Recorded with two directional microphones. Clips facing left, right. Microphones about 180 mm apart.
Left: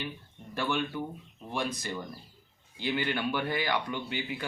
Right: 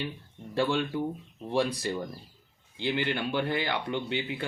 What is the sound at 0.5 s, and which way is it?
Speech, 30° right (ahead or behind).